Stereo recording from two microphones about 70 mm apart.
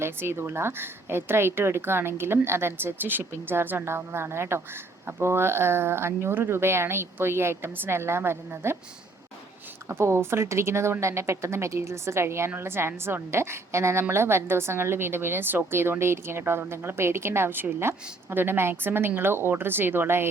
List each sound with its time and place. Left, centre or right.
0.0 s a woman's voice: right
9.9 s a woman's voice: right